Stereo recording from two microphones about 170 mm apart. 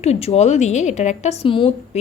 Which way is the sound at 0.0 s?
40° left (ahead or behind).